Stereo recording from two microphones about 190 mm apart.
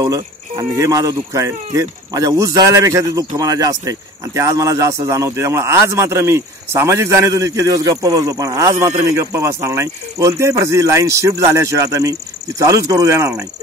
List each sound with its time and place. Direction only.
0.0 s speech: 20° right (ahead or behind)